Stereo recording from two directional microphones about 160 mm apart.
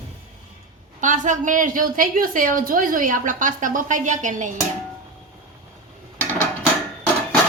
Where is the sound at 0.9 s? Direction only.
50° right (ahead or behind).